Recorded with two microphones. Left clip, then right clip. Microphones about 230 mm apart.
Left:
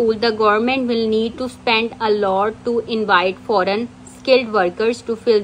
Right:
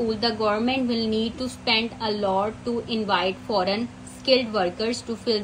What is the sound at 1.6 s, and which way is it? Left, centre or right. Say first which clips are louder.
A woman's voice: left 7 dB; left.